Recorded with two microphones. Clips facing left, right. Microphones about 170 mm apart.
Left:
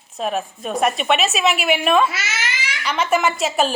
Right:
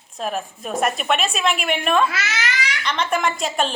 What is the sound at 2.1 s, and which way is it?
Speech, 25° left (ahead or behind).